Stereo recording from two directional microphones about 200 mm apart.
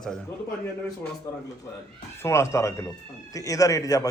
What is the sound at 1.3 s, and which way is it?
Speech, 15° left (ahead or behind).